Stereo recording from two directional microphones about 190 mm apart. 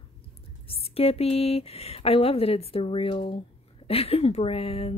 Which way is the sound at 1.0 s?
30° left (ahead or behind).